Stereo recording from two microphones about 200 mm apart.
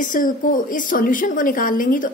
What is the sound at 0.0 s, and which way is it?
A woman's voice, 40° left (ahead or behind).